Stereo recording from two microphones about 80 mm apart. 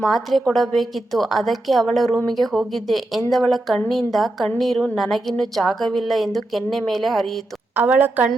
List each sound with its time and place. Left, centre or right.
0.0 s a woman's voice: centre
7.8 s a woman's voice: right